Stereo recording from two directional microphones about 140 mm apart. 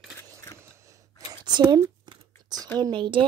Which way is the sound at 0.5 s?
20° right (ahead or behind).